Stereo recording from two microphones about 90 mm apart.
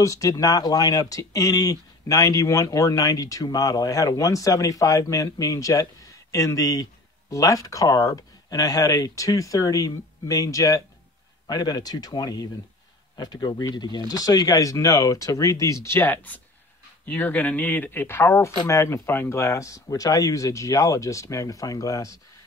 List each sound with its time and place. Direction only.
0.0 s speech: 40° left (ahead or behind)
16.0 s speech: 20° left (ahead or behind); by 22.2 s 35° left (ahead or behind)